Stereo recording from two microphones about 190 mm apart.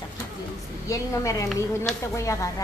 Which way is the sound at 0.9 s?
15° left (ahead or behind).